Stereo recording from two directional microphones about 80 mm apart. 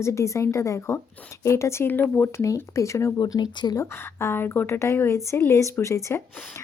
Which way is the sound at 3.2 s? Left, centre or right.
Left.